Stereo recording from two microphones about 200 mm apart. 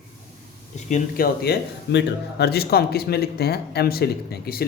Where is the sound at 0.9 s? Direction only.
50° left (ahead or behind).